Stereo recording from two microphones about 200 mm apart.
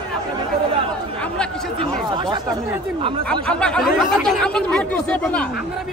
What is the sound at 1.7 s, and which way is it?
Speech, 20° right (ahead or behind).